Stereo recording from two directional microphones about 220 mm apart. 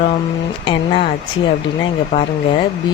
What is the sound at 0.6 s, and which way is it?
Speech, 25° left (ahead or behind).